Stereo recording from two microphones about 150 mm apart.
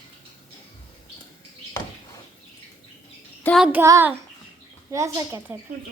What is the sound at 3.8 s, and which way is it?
A child's voice, 15° right (ahead or behind).